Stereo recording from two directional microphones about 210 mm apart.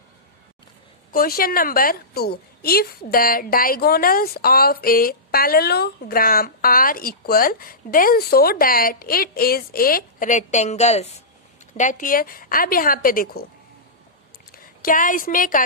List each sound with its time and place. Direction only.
1.1 s a woman's voice: 45° left (ahead or behind)
14.5 s a woman's voice: 40° left (ahead or behind)